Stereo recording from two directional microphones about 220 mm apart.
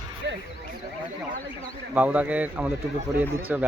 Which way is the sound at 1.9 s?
5° right (ahead or behind).